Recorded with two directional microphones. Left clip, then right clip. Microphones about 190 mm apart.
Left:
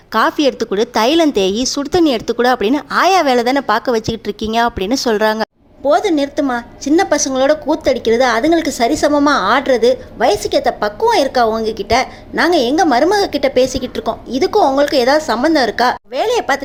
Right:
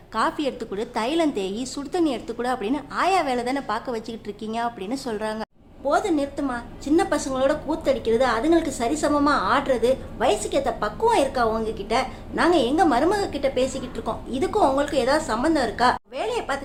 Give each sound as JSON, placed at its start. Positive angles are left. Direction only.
{"t": 0.1, "sound": "a woman's voice", "side_deg": 35}
{"t": 5.9, "sound": "a woman's voice", "side_deg": 25}